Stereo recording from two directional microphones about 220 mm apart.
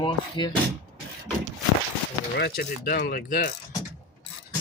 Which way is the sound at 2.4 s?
45° left (ahead or behind).